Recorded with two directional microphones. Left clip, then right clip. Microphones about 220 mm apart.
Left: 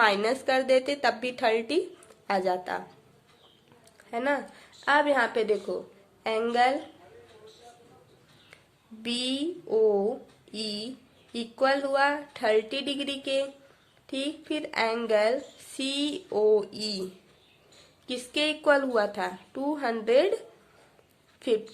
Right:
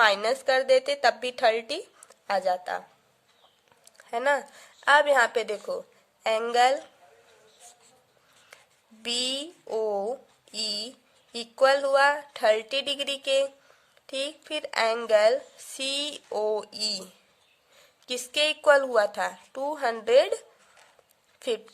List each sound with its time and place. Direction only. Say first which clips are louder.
0.0 s speech: right 2 dB; 30° right (ahead or behind)
3.9 s speech: right 3 dB; 35° right (ahead or behind)
9.0 s speech: right 1 dB; 40° right (ahead or behind)
21.3 s a sound: left 3 dB; 40° right (ahead or behind)